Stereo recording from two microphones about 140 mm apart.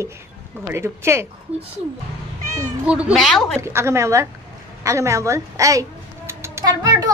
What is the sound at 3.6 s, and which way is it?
Music, 20° right (ahead or behind).